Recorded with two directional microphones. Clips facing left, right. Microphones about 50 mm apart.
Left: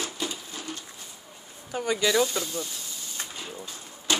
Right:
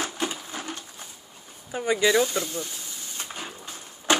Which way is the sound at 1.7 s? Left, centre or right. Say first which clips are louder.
Right 3 dB; centre.